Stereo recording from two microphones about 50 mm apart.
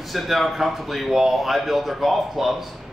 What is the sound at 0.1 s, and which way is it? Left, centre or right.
Speech, centre.